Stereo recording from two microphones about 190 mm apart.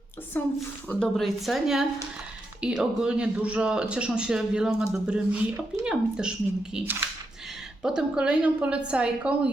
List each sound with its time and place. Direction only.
0.4 s a woman's voice: 10° left (ahead or behind); by 9.5 s 5° right (ahead or behind)